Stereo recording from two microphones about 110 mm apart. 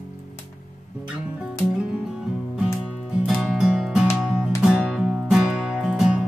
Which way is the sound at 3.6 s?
5° right (ahead or behind).